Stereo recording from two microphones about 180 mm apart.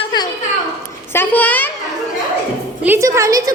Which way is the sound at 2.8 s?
15° right (ahead or behind).